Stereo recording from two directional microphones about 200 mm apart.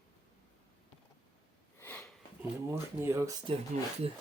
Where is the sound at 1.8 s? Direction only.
10° left (ahead or behind).